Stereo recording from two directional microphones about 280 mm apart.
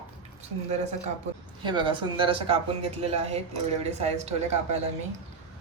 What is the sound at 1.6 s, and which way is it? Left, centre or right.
A man's voice, centre.